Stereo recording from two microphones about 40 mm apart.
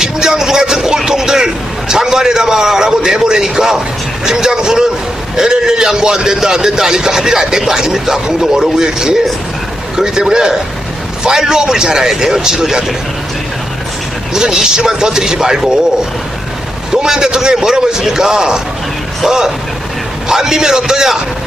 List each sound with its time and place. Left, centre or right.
0.0 s speech: centre
14.3 s speech: centre
16.9 s speech: centre